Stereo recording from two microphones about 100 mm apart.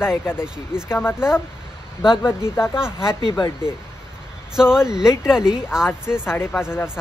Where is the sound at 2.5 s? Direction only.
25° left (ahead or behind).